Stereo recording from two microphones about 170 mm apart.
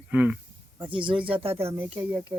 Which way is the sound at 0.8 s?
30° right (ahead or behind).